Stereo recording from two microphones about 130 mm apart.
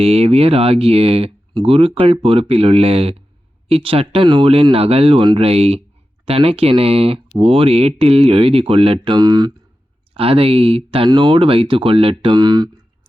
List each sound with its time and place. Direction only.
0.0 s speech: 50° right (ahead or behind)
9.1 s speech: 35° right (ahead or behind)
10.2 s speech: 45° right (ahead or behind)